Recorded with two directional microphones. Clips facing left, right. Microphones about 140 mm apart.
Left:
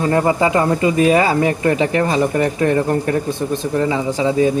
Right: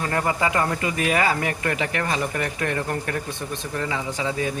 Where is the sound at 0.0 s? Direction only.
25° left (ahead or behind).